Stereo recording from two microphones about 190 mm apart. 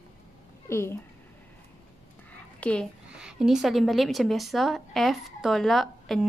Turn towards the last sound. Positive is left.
turn(degrees=0)  # may be behind; listen again after turning